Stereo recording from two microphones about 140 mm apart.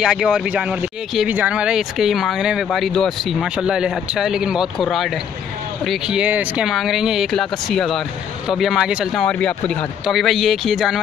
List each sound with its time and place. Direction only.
0.0 s speech: 5° right (ahead or behind)